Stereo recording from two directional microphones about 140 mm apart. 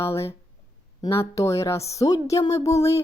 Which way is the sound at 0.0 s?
20° left (ahead or behind).